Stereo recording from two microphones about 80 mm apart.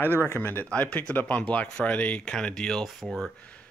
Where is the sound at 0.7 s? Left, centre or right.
Centre.